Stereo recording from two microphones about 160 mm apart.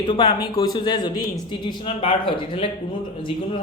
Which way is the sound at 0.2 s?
25° left (ahead or behind).